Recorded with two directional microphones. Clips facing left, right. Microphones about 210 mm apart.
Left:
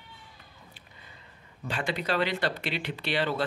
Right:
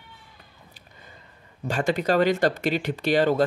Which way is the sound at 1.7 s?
45° right (ahead or behind).